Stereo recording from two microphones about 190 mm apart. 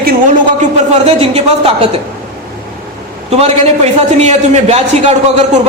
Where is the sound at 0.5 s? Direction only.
35° right (ahead or behind).